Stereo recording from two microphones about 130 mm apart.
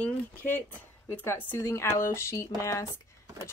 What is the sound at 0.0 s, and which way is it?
Speech, 10° left (ahead or behind).